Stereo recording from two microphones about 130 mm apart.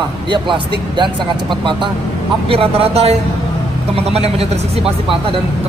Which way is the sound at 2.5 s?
45° right (ahead or behind).